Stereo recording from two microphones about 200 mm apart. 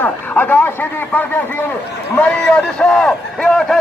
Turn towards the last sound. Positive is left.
turn(degrees=5)  # may be behind; listen again after turning